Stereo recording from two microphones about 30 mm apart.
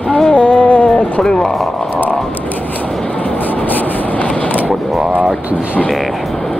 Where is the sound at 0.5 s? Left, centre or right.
Left.